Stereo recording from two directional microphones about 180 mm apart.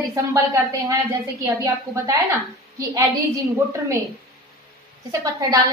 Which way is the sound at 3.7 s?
15° right (ahead or behind).